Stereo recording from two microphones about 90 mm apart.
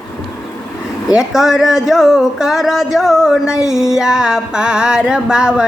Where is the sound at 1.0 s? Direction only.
5° right (ahead or behind).